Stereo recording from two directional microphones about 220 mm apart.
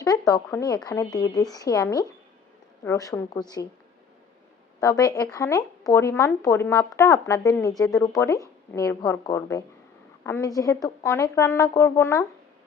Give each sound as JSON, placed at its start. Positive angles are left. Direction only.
{"t": 0.0, "sound": "speech", "side_deg": 15}
{"t": 4.8, "sound": "speech", "side_deg": 15}